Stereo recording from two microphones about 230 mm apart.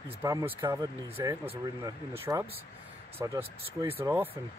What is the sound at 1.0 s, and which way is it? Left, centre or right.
Speech, right.